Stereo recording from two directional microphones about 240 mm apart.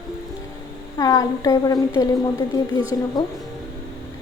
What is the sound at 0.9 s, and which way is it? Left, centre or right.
A woman's voice, centre.